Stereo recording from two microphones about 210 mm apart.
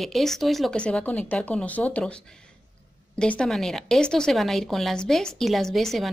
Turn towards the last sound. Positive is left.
turn(degrees=0)  # may be behind; listen again after turning